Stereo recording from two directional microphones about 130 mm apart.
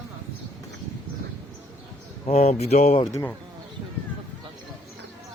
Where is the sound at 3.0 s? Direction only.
20° left (ahead or behind).